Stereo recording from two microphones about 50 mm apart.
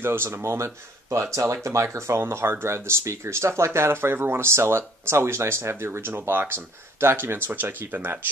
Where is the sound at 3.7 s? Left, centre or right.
Right.